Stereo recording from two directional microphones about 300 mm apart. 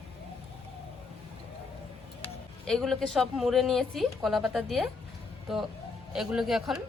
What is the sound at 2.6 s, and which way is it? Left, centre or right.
A woman's voice, centre.